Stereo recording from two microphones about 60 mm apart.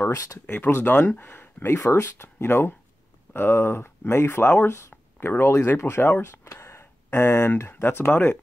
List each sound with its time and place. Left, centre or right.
0.0 s speech: left
0.7 s speech: left